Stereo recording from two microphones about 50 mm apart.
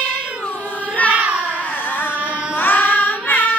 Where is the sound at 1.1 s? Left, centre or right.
Right.